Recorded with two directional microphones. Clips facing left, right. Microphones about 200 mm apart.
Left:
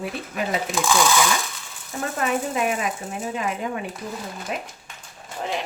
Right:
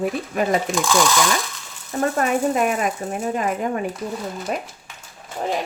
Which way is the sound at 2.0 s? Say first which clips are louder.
Right 5 dB; 45° right (ahead or behind).